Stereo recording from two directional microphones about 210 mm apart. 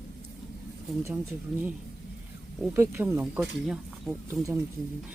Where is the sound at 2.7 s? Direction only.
10° right (ahead or behind).